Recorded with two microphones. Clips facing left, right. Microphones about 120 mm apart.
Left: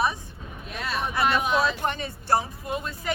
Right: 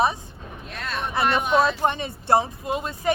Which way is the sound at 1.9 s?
25° right (ahead or behind).